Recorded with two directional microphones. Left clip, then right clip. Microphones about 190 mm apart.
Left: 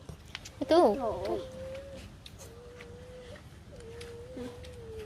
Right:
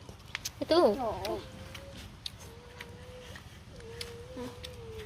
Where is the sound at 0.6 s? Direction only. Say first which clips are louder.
Left 2 dB; 10° left (ahead or behind).